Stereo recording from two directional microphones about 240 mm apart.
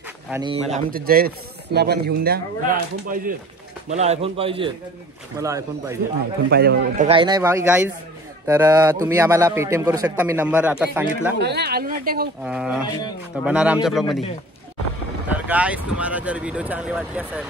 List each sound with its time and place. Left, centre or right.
0.3 s speech: centre
0.7 s a man's voice: right; by 5.9 s centre
6.5 s speech: right
7.1 s speech: centre
11.3 s speech: right
12.4 s speech: centre
15.2 s speech: centre